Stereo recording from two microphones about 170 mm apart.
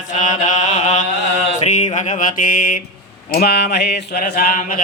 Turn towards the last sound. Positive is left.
turn(degrees=60)  # may be behind; listen again after turning